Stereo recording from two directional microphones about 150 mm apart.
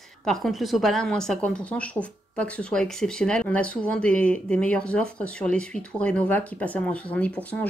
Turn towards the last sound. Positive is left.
turn(degrees=10)  # may be behind; listen again after turning